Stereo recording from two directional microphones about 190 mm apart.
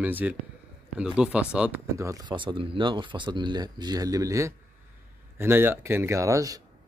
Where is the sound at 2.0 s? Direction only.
15° right (ahead or behind).